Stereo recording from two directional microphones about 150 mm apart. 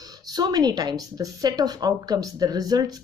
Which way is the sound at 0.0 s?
25° right (ahead or behind).